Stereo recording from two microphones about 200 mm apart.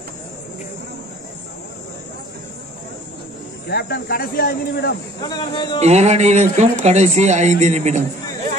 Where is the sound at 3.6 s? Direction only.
55° left (ahead or behind).